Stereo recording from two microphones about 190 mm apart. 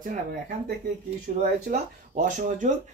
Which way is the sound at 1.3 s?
40° right (ahead or behind).